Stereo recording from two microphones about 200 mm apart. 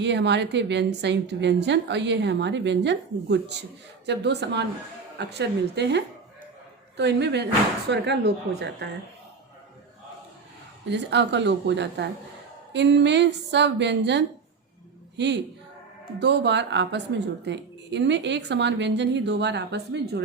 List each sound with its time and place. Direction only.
0.0 s speech: 60° right (ahead or behind)
10.8 s speech: 60° right (ahead or behind)
16.2 s speech: 60° right (ahead or behind)